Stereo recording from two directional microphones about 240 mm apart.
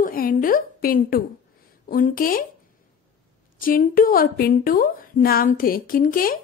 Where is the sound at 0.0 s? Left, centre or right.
Left.